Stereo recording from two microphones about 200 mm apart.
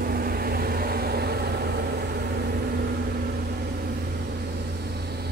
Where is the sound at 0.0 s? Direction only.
50° right (ahead or behind).